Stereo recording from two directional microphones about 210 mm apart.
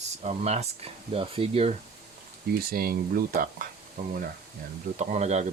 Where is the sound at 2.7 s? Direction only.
45° right (ahead or behind).